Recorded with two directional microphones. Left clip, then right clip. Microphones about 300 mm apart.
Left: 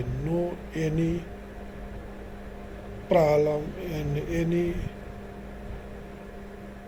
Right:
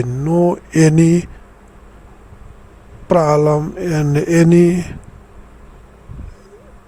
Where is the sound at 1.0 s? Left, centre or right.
Right.